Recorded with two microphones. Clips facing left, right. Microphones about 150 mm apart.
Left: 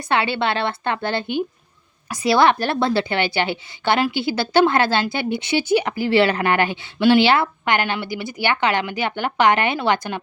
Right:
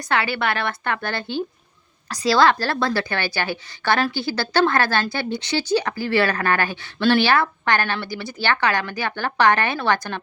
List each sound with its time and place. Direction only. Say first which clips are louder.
0.0 s speech: left 2 dB; 25° left (ahead or behind)